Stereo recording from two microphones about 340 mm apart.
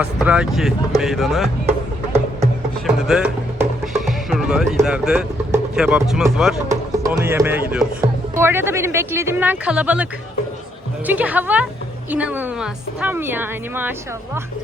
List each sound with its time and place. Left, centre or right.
0.0 s a woman's voice: centre
2.8 s music: centre
6.9 s a woman's voice: centre